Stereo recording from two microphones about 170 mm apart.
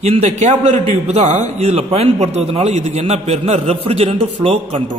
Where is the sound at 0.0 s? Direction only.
40° right (ahead or behind).